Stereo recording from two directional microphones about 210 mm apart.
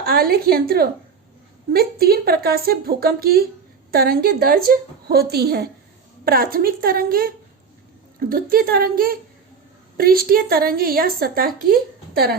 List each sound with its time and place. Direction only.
0.0 s a woman's voice: 45° right (ahead or behind)